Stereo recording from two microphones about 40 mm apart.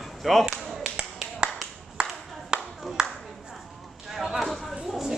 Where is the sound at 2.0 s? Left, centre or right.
Right.